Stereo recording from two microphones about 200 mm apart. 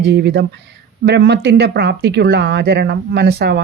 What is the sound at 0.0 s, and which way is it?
Speech, 55° right (ahead or behind).